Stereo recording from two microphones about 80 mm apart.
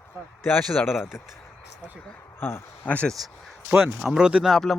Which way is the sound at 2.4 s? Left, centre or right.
Left.